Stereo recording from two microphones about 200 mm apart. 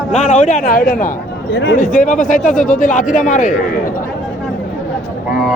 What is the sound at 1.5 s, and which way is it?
Speech, 55° left (ahead or behind).